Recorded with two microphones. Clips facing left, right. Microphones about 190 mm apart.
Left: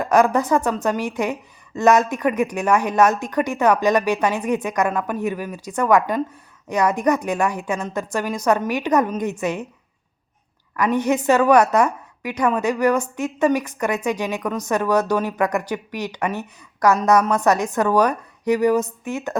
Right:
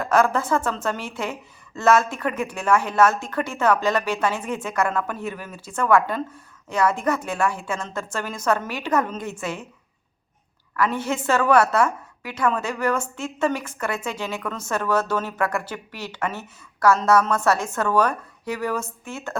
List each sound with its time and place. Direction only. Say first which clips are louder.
0.0 s a woman's voice: left 3 dB; 15° left (ahead or behind)
10.8 s a woman's voice: left 5 dB; 15° left (ahead or behind)